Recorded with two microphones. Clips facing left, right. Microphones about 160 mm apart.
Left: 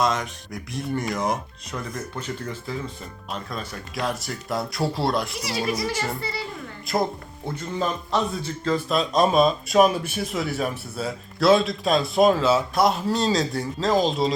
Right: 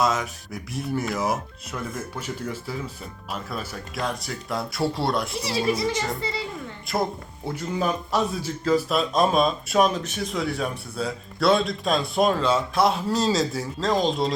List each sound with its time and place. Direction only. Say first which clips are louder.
0.0 s a man's voice: even; 5° right (ahead or behind)
5.4 s speech: right 2 dB; 30° right (ahead or behind)
6.8 s a man's voice: left 2 dB; centre (ahead or behind)